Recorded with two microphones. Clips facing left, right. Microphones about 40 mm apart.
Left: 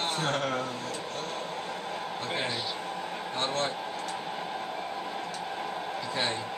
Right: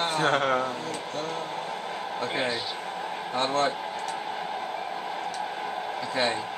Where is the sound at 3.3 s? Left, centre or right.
Centre.